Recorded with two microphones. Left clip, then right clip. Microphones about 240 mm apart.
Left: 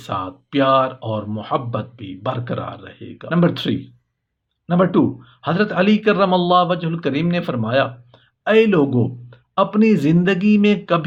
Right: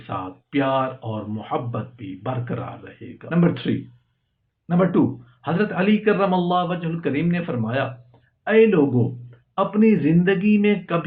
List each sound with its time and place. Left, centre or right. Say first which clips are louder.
0.0 s speech: left 5 dB; left